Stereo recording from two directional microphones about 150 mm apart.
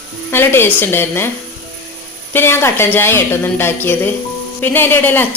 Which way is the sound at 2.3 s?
15° left (ahead or behind).